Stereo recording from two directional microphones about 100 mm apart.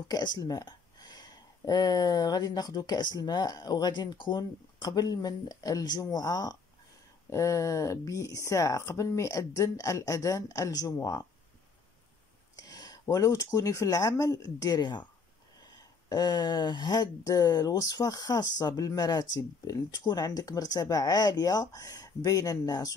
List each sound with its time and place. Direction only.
0.1 s speech: 40° left (ahead or behind)
12.5 s speech: 40° left (ahead or behind)